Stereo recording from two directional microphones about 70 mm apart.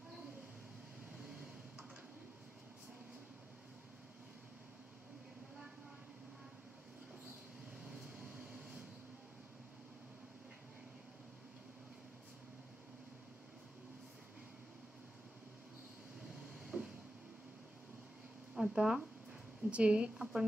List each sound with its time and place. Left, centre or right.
7.9 s a sound: centre
16.5 s vehicle: centre
18.5 s a woman's voice: centre